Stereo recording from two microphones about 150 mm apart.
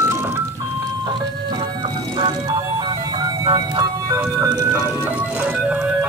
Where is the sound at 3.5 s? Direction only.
25° right (ahead or behind).